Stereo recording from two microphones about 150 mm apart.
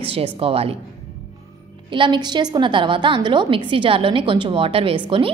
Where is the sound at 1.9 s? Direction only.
35° right (ahead or behind).